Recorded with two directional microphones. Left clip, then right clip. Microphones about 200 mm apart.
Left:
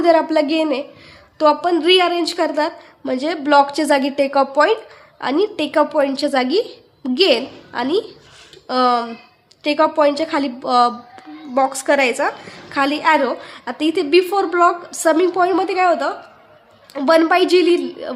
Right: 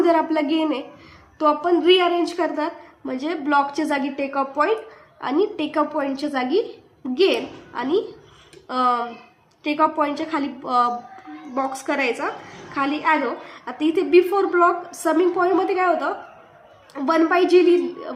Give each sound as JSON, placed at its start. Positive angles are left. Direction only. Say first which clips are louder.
{"t": 0.0, "sound": "a woman's voice", "louder": "left 5 dB", "side_deg": 25}